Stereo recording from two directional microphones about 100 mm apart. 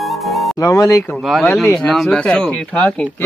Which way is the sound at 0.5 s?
35° left (ahead or behind).